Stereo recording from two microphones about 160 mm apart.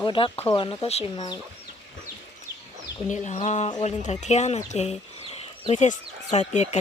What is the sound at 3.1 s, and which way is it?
Speech, 45° left (ahead or behind).